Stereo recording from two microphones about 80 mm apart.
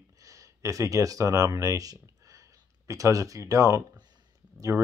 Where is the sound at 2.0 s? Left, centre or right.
Right.